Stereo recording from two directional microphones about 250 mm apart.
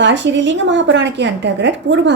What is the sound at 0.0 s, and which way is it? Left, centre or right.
Speech, right.